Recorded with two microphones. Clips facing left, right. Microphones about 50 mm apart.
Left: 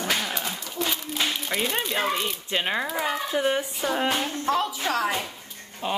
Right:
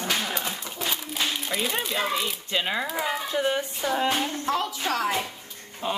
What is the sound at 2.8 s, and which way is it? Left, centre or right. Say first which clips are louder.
Speech: left 1 dB; centre.